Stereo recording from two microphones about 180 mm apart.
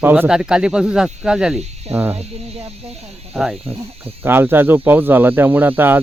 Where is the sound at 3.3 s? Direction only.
Centre (ahead or behind).